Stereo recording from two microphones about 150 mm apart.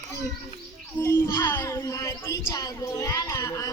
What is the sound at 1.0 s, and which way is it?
Speech, 15° left (ahead or behind).